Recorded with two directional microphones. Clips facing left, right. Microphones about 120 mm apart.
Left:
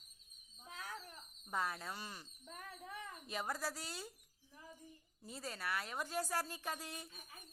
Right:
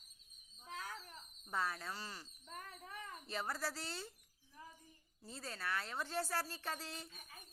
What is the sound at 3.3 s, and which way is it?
Speech, 15° left (ahead or behind).